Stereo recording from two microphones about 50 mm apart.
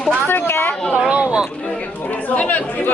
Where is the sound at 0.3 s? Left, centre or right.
Left.